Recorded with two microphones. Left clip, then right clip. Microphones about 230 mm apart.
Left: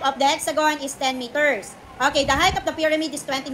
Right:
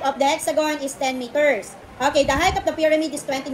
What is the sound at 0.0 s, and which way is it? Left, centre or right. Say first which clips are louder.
A woman's voice: even; centre.